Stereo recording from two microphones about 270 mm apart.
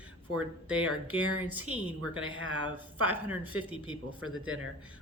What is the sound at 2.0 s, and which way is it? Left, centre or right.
Speech, right.